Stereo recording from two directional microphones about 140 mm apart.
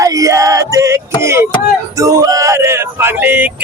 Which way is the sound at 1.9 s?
25° right (ahead or behind).